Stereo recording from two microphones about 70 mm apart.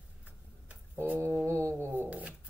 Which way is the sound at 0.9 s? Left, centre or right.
Right.